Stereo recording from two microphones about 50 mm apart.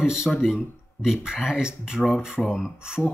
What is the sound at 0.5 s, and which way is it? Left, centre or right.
Speech, centre.